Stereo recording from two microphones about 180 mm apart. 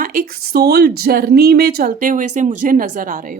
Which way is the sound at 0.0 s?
55° right (ahead or behind).